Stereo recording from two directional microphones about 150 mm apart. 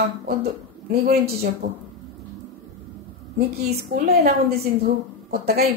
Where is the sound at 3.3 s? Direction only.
90° right.